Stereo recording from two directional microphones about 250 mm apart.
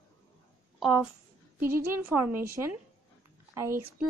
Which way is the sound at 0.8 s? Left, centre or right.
Centre.